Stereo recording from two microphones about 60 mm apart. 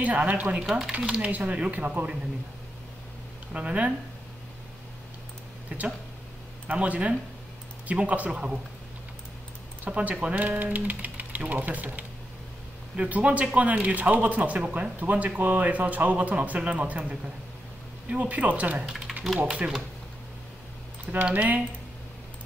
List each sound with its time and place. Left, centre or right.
0.0 s speech: right
0.6 s speech: centre
1.2 s speech: right
3.5 s speech: right
5.7 s speech: centre
9.8 s speech: right
18.1 s speech: right
18.9 s speech: centre
21.0 s speech: right